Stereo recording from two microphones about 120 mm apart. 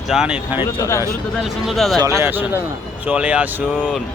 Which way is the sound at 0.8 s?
25° left (ahead or behind).